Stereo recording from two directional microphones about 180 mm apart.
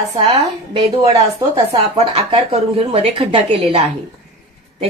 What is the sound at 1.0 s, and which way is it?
Speech, 35° right (ahead or behind).